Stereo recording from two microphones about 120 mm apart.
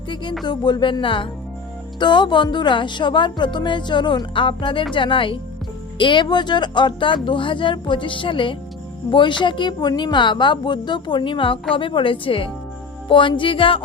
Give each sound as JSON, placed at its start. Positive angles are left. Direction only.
{"t": 0.4, "sound": "a woman's voice", "side_deg": 40}